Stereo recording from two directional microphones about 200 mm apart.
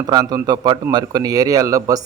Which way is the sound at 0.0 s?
20° right (ahead or behind).